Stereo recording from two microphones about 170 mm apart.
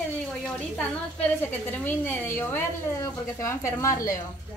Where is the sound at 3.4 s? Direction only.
20° left (ahead or behind).